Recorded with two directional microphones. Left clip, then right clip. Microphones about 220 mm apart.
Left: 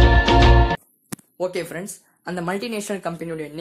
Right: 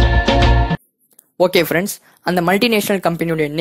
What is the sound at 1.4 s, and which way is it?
Speech, 40° right (ahead or behind).